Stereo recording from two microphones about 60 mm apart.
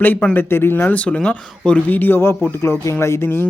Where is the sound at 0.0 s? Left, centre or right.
Left.